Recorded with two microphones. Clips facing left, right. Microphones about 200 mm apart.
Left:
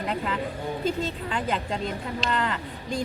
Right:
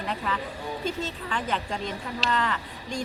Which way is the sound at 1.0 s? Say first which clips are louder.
Left 3 dB; 35° left (ahead or behind).